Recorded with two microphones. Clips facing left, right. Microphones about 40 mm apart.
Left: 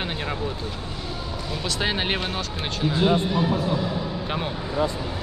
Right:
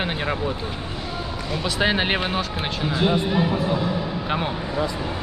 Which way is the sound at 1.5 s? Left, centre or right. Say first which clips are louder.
Right 5 dB; centre.